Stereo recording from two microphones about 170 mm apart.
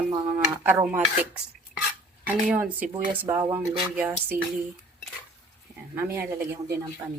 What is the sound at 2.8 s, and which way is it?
Speech, 10° right (ahead or behind).